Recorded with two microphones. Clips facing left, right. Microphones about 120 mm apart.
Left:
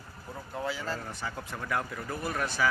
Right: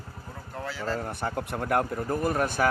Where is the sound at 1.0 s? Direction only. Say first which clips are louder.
Right 7 dB; 55° right (ahead or behind).